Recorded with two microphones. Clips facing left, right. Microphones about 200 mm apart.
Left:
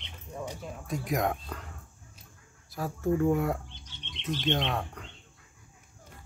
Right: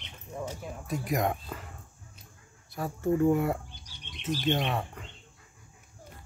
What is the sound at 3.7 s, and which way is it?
Bird, 25° left (ahead or behind).